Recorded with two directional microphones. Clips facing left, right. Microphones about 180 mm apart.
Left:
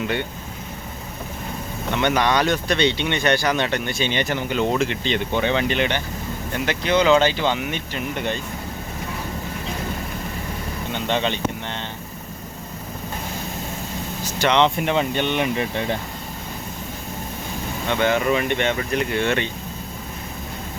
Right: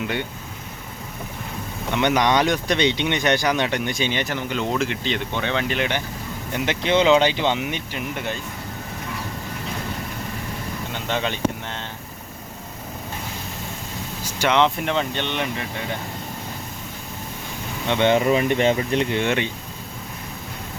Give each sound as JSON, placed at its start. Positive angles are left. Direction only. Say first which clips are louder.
{"t": 1.9, "sound": "speech", "louder": "right 1 dB", "side_deg": -15}
{"t": 4.1, "sound": "speech", "louder": "left 2 dB", "side_deg": 0}
{"t": 5.6, "sound": "speech", "louder": "left 2 dB", "side_deg": -5}
{"t": 6.5, "sound": "speech", "louder": "even", "side_deg": -20}
{"t": 10.9, "sound": "speech", "louder": "left 3 dB", "side_deg": -5}
{"t": 14.3, "sound": "speech", "louder": "left 1 dB", "side_deg": -10}
{"t": 17.8, "sound": "speech", "louder": "right 2 dB", "side_deg": -20}